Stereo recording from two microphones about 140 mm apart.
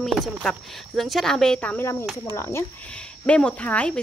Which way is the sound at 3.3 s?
5° left (ahead or behind).